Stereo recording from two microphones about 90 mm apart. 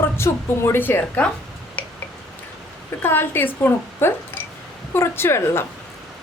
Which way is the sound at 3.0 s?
25° left (ahead or behind).